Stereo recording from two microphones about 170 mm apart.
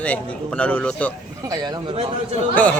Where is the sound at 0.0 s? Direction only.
10° left (ahead or behind).